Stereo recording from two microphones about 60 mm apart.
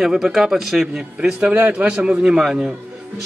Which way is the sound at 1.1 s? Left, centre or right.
Centre.